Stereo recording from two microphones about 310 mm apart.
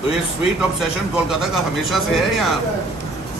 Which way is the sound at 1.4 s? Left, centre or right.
Centre.